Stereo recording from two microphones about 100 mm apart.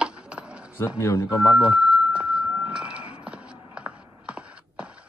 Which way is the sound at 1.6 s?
10° right (ahead or behind).